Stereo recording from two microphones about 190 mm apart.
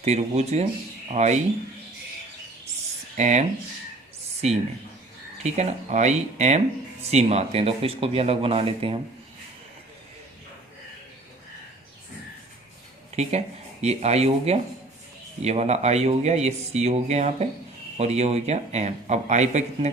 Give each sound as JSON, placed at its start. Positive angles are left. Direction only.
{"t": 0.0, "sound": "speech", "side_deg": -35}
{"t": 3.2, "sound": "speech", "side_deg": -40}
{"t": 5.4, "sound": "speech", "side_deg": -35}
{"t": 13.2, "sound": "speech", "side_deg": -35}